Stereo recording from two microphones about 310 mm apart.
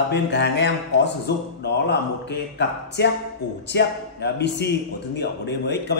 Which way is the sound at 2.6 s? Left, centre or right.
Left.